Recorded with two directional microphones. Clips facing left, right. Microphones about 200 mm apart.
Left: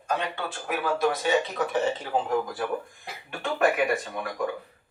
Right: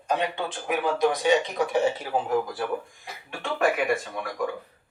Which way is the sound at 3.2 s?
Centre (ahead or behind).